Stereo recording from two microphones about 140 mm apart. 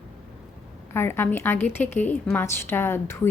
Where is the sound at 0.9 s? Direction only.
15° left (ahead or behind).